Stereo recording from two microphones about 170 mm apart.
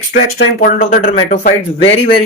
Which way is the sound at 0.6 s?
50° left (ahead or behind).